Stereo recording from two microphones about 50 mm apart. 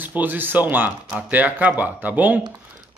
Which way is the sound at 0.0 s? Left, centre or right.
Right.